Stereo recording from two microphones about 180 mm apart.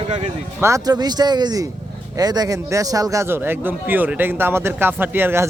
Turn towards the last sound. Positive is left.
turn(degrees=-10)  # may be behind; listen again after turning